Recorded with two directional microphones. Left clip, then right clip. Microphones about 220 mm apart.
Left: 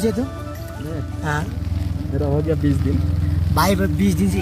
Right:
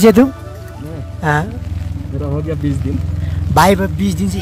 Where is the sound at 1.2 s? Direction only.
30° right (ahead or behind).